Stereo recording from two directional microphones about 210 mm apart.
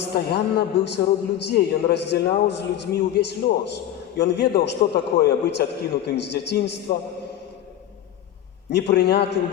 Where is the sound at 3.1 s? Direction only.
50° left (ahead or behind).